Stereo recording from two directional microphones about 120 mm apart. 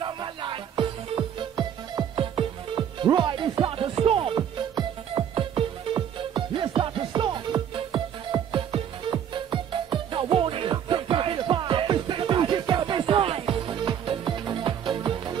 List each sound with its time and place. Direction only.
0.0 s music: 40° right (ahead or behind)